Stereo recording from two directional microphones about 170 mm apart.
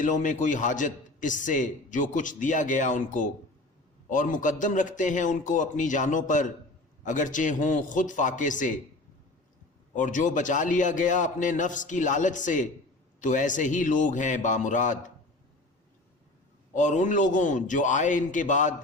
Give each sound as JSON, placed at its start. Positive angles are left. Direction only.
{"t": 0.0, "sound": "a man's voice", "side_deg": 50}
{"t": 9.9, "sound": "a man's voice", "side_deg": 50}
{"t": 16.7, "sound": "a man's voice", "side_deg": 45}